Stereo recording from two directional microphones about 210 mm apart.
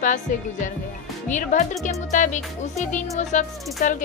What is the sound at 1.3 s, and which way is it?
Speech, 35° left (ahead or behind).